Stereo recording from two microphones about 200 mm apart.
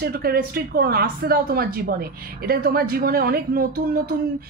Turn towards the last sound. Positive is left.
turn(degrees=-45)  # may be behind; listen again after turning